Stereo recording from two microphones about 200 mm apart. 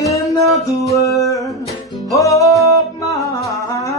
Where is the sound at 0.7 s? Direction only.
Centre (ahead or behind).